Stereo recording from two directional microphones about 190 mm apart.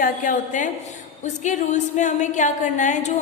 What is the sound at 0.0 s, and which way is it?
A woman's voice, 45° left (ahead or behind).